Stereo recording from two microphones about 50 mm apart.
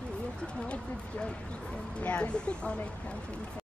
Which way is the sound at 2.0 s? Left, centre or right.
Left.